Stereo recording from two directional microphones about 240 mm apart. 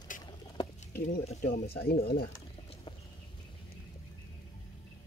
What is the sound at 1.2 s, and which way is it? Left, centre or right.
Speech, left.